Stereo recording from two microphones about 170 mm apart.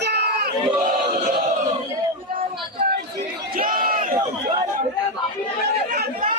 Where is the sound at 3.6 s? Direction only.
55° right (ahead or behind).